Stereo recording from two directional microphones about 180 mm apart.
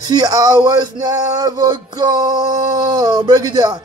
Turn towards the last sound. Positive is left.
turn(degrees=-20)  # may be behind; listen again after turning